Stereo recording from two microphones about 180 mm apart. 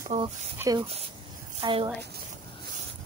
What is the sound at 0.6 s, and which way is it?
Speech, 20° right (ahead or behind).